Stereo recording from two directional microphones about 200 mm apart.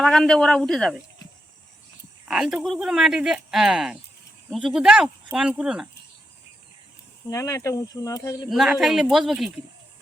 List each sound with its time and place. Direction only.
0.0 s speech: 5° left (ahead or behind)
2.2 s speech: 5° right (ahead or behind)
7.3 s speech: 15° left (ahead or behind)
8.4 s speech: centre (ahead or behind)